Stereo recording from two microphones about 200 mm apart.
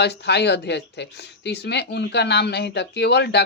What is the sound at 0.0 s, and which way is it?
Speech, 55° left (ahead or behind).